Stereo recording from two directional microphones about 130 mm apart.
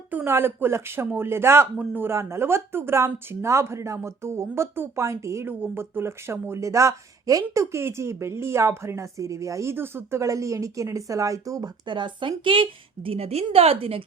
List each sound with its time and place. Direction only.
0.1 s speech: 15° right (ahead or behind); by 14.0 s 45° right (ahead or behind)